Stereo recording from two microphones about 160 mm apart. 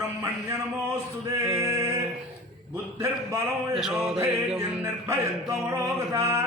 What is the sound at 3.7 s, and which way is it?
Music, 5° right (ahead or behind).